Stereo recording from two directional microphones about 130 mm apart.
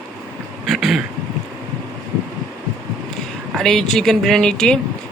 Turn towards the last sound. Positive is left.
turn(degrees=5)  # may be behind; listen again after turning